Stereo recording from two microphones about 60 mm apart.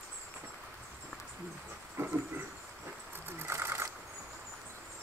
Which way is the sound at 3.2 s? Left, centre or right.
Right.